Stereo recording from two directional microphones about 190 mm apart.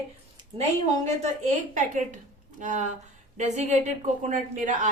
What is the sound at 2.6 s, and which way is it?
A woman's voice, 40° right (ahead or behind).